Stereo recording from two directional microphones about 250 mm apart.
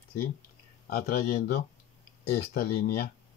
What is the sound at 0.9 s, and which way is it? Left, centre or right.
Speech, left.